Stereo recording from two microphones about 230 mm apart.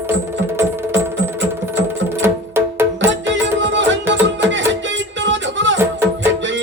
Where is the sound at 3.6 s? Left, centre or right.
Right.